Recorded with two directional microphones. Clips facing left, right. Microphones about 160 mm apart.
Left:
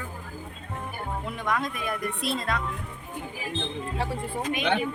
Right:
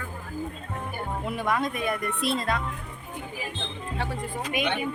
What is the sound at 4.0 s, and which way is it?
Speech, 30° left (ahead or behind).